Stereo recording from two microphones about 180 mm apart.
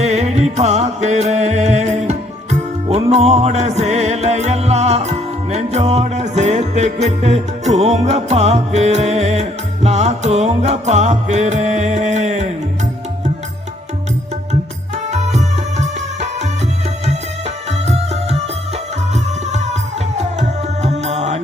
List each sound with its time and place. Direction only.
0.0 s music: 40° right (ahead or behind)
15.1 s music: 40° right (ahead or behind)
17.7 s music: 35° right (ahead or behind)
19.5 s music: 40° right (ahead or behind)